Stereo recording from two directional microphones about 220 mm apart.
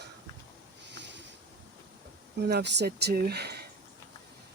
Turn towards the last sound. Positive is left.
turn(degrees=-45)  # may be behind; listen again after turning